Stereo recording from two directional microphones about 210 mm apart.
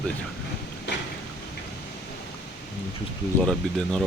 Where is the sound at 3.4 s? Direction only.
5° left (ahead or behind).